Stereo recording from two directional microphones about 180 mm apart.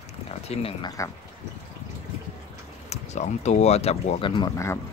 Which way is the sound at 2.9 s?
40° left (ahead or behind).